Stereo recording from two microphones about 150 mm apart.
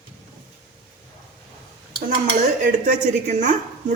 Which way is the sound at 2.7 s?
55° right (ahead or behind).